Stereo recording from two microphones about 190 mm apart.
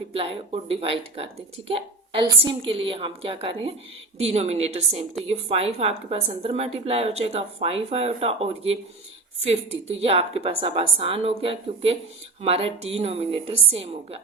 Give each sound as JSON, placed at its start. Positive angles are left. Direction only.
{"t": 0.1, "sound": "a woman's voice", "side_deg": -30}